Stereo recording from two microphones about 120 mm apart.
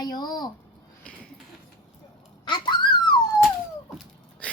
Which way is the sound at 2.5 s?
40° left (ahead or behind).